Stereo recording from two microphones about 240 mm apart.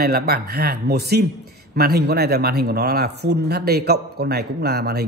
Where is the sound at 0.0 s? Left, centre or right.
Right.